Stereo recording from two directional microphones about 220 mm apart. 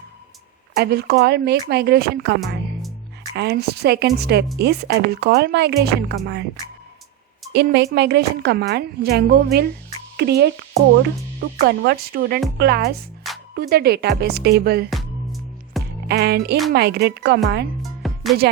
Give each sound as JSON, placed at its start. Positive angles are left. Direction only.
{"t": 0.8, "sound": "a woman's voice", "side_deg": -45}
{"t": 7.5, "sound": "a woman's voice", "side_deg": -45}
{"t": 14.8, "sound": "music", "side_deg": 0}
{"t": 16.0, "sound": "a woman's voice", "side_deg": -45}
{"t": 17.8, "sound": "music", "side_deg": 0}